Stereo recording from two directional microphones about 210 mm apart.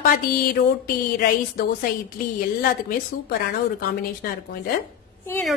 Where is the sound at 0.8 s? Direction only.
45° left (ahead or behind).